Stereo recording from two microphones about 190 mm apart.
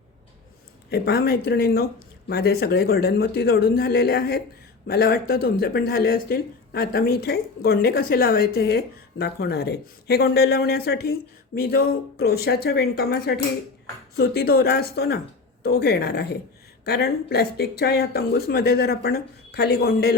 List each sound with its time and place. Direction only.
0.9 s speech: 55° left (ahead or behind)